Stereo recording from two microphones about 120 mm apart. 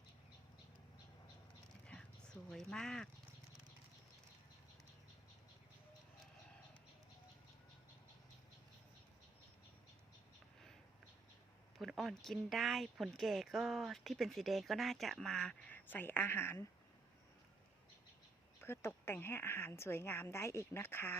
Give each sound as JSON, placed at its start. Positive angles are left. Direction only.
{"t": 2.5, "sound": "speech", "side_deg": 5}
{"t": 11.8, "sound": "speech", "side_deg": 0}
{"t": 18.6, "sound": "a woman's voice", "side_deg": 20}